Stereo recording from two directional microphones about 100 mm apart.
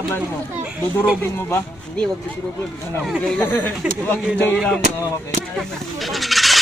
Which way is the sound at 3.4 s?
20° left (ahead or behind).